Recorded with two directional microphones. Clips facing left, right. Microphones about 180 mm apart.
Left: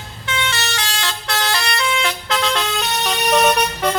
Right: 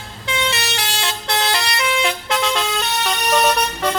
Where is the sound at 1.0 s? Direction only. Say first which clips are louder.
Right 2 dB; 25° right (ahead or behind).